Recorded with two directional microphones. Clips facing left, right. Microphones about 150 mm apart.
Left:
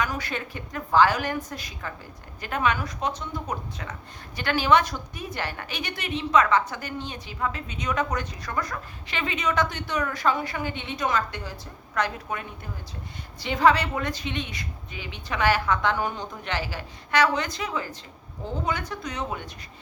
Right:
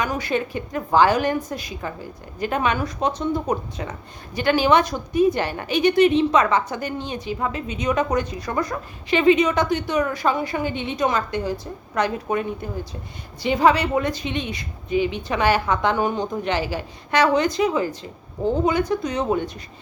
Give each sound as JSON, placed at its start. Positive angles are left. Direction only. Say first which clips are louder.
{"t": 0.0, "sound": "a woman's voice", "louder": "right 6 dB", "side_deg": -15}